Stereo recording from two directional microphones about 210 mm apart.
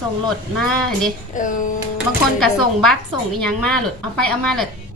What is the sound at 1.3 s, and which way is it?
Speech, 40° left (ahead or behind).